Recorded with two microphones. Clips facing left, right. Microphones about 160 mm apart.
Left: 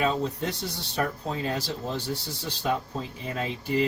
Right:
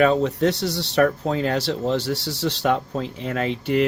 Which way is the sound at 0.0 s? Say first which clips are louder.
Right 9 dB; 75° right (ahead or behind).